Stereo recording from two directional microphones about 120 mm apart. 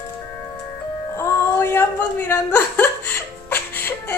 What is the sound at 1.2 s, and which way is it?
Music, 20° left (ahead or behind).